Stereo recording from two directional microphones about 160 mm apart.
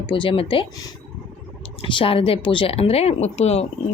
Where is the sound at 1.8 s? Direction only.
30° left (ahead or behind).